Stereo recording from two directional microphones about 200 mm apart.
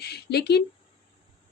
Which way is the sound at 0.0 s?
55° left (ahead or behind).